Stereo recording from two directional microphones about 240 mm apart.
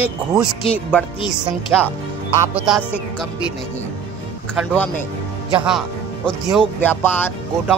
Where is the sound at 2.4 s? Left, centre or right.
Centre.